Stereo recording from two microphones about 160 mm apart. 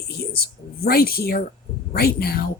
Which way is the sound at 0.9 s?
70° left (ahead or behind).